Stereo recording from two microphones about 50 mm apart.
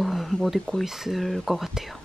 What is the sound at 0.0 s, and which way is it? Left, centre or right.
Wild animals, centre.